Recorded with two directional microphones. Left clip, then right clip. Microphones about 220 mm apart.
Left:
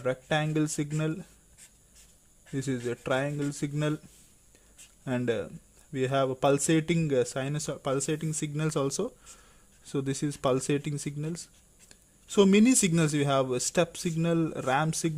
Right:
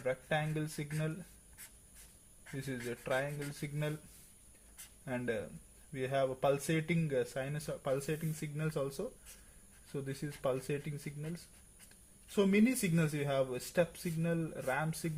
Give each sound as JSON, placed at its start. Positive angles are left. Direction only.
{"t": 0.0, "sound": "speech", "side_deg": 50}
{"t": 2.6, "sound": "speech", "side_deg": 50}
{"t": 5.0, "sound": "speech", "side_deg": 50}